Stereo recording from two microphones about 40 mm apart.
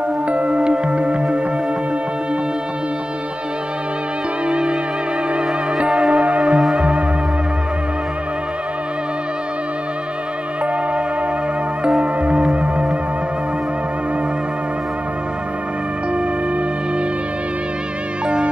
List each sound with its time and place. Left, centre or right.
0.3 s music: right
4.5 s music: right
12.0 s music: right
18.2 s music: right